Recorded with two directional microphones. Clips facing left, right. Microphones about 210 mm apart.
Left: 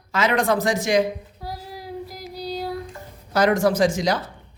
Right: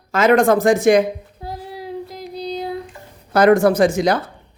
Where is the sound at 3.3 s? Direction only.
60° right (ahead or behind).